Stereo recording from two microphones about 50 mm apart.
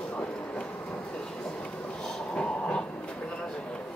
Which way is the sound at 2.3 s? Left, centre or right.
Left.